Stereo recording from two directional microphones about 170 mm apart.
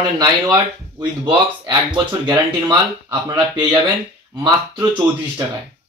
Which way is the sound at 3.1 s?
25° right (ahead or behind).